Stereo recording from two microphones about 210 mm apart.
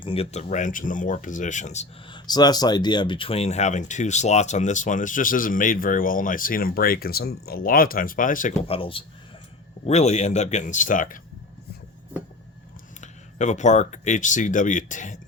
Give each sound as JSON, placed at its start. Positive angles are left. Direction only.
{"t": 0.0, "sound": "speech", "side_deg": 25}
{"t": 8.6, "sound": "speech", "side_deg": 25}
{"t": 13.0, "sound": "speech", "side_deg": 35}